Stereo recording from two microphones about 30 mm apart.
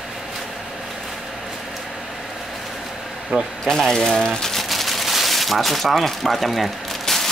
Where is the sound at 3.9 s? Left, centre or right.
Centre.